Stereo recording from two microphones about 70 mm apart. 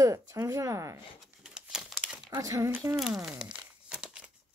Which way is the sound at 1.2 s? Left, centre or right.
Centre.